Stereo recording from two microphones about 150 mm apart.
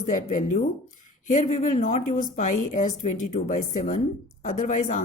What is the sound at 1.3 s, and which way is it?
A woman's voice, 50° left (ahead or behind).